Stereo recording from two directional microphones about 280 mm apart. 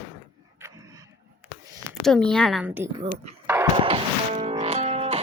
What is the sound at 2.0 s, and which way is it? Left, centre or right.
Speech, centre.